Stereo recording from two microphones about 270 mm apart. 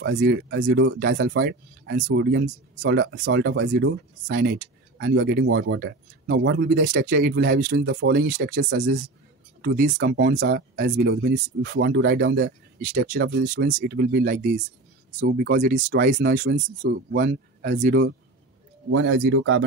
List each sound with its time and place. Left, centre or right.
0.0 s speech: right
18.9 s speech: right